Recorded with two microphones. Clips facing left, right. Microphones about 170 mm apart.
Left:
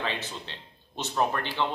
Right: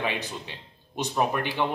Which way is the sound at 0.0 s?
15° right (ahead or behind).